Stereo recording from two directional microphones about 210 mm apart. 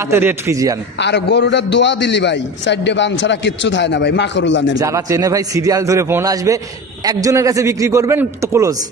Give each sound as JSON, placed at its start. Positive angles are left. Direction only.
{"t": 0.1, "sound": "a man's voice", "side_deg": -10}
{"t": 0.9, "sound": "a man's voice", "side_deg": 55}
{"t": 4.7, "sound": "a man's voice", "side_deg": -15}